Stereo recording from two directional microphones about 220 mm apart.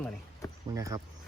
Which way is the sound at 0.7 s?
15° right (ahead or behind).